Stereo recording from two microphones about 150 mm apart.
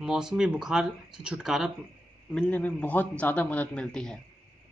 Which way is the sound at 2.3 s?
10° left (ahead or behind).